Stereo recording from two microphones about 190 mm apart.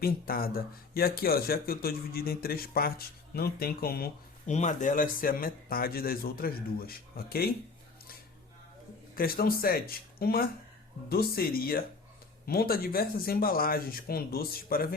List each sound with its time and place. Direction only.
0.0 s a man's voice: 50° left (ahead or behind)
4.4 s a man's voice: 40° left (ahead or behind)
9.1 s a man's voice: 50° left (ahead or behind)